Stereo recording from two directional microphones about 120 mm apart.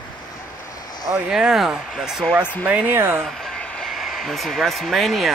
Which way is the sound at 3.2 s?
5° left (ahead or behind).